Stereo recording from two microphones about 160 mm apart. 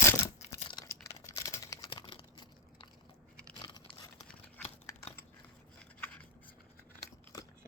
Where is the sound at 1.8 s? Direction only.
30° left (ahead or behind).